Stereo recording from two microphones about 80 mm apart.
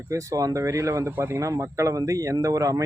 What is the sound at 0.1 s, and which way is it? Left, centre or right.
Speech, right.